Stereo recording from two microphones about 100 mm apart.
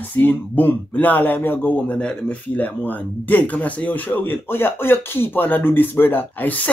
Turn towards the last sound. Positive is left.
turn(degrees=15)  # may be behind; listen again after turning